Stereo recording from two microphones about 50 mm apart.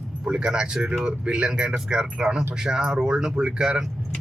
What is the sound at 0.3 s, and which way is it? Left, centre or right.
Speech, centre.